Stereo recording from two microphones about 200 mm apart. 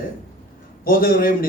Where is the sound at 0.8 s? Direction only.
45° left (ahead or behind).